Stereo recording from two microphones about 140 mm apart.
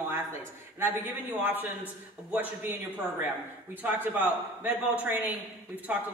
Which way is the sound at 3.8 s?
15° right (ahead or behind).